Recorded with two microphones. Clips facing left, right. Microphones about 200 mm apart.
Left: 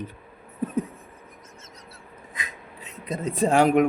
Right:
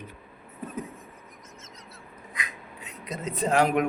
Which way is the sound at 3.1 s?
30° left (ahead or behind).